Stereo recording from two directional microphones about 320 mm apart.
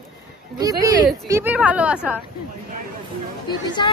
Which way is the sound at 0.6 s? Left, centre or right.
Centre.